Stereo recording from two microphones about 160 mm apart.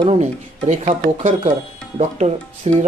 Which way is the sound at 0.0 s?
40° right (ahead or behind).